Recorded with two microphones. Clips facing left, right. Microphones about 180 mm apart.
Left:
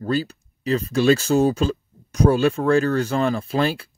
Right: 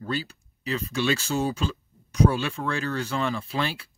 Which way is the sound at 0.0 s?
40° left (ahead or behind).